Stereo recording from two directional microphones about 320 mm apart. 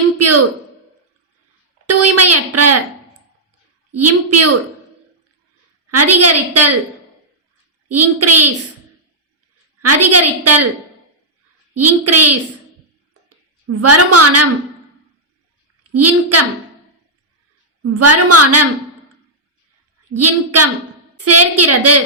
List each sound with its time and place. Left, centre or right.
1.9 s a woman's voice: right
3.9 s a woman's voice: right
5.9 s a woman's voice: right
7.9 s a woman's voice: right
9.8 s a woman's voice: right
11.7 s a woman's voice: right
13.7 s a woman's voice: right
15.8 s a woman's voice: right
17.8 s a woman's voice: right
20.1 s a woman's voice: right